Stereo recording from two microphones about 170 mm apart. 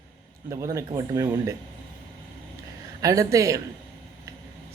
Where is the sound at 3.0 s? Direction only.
20° right (ahead or behind).